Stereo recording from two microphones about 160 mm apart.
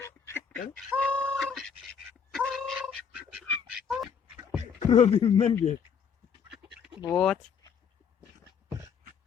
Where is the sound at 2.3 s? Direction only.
5° left (ahead or behind).